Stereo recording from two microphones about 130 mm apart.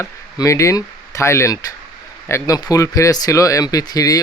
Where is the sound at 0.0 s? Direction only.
25° left (ahead or behind).